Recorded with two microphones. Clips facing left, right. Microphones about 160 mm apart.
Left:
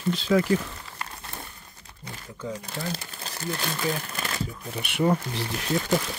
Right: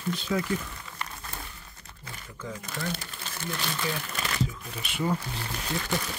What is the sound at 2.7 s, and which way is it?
Speech, 35° left (ahead or behind).